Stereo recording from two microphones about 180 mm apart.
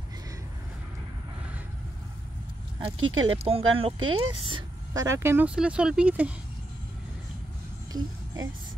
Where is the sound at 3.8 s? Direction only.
30° right (ahead or behind).